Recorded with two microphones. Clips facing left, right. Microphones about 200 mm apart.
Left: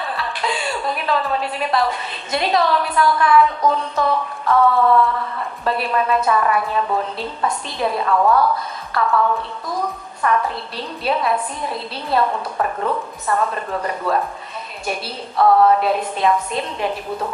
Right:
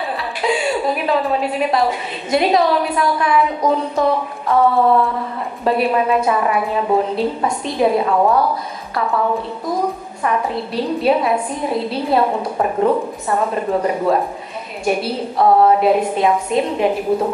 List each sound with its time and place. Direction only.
0.2 s a woman's voice: 10° right (ahead or behind)
11.1 s a woman's voice: 10° right (ahead or behind)
15.3 s a woman's voice: 20° right (ahead or behind)